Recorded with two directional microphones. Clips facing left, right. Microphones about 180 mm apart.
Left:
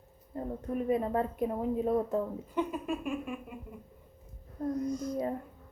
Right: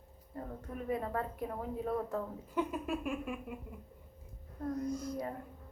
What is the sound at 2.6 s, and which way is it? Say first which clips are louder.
Speech: left 2 dB; 5° right (ahead or behind).